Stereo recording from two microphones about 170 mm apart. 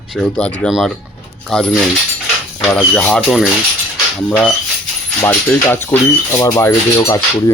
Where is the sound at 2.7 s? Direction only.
5° left (ahead or behind).